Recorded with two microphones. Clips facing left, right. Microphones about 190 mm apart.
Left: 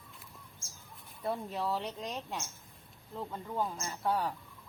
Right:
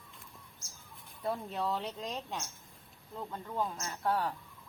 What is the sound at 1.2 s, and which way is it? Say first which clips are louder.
Speech: even; centre (ahead or behind).